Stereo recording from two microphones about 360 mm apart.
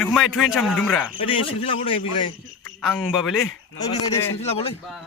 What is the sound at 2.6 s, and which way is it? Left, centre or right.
Speech, centre.